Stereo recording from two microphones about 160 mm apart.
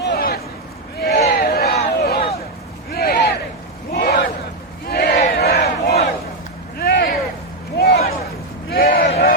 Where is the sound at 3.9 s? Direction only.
85° left.